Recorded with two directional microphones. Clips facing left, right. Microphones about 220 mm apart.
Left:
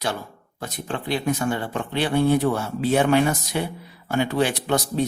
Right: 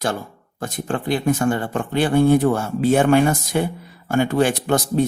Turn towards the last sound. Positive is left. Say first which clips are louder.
# right 4 dB
turn(degrees=-50)  # may be behind; listen again after turning